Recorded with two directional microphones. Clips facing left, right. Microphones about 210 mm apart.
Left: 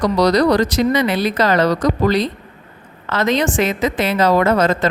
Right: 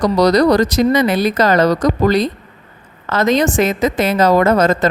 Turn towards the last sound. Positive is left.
turn(degrees=-45)  # may be behind; listen again after turning